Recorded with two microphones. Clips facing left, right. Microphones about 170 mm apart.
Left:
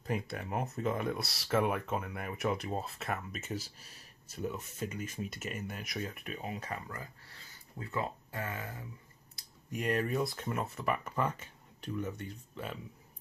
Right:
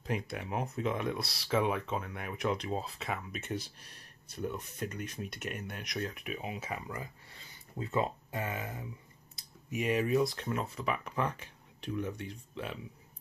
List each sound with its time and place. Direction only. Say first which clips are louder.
0.0 s speech: even; centre (ahead or behind)
7.8 s speech: right 4 dB; 20° right (ahead or behind)
9.7 s speech: right 3 dB; 5° right (ahead or behind)